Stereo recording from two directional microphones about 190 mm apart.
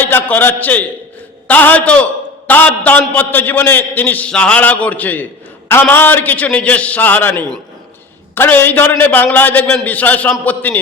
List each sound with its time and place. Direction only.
0.0 s a man's voice: 10° left (ahead or behind)